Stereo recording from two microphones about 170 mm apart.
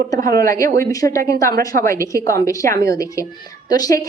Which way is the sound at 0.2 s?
60° right (ahead or behind).